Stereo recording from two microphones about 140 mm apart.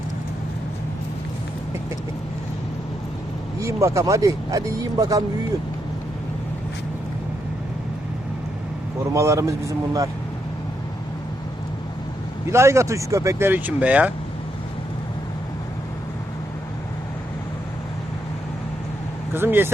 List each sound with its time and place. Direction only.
3.6 s speech: 20° right (ahead or behind)
9.1 s speech: 20° right (ahead or behind)
12.5 s speech: 20° right (ahead or behind)
19.3 s speech: 15° right (ahead or behind)